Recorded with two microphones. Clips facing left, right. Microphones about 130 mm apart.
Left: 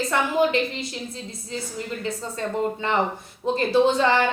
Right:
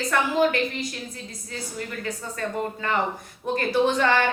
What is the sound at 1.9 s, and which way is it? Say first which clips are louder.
A woman's voice: left 3 dB; 20° left (ahead or behind).